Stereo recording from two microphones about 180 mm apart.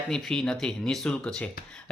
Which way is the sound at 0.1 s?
5° left (ahead or behind).